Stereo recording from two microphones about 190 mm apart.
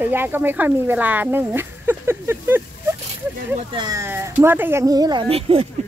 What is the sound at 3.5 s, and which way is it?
A woman's voice, 25° right (ahead or behind).